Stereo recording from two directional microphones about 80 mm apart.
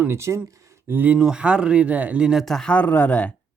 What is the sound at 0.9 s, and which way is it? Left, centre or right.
Speech, right.